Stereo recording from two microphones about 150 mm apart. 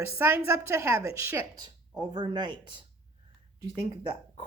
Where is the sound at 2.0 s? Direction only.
30° right (ahead or behind).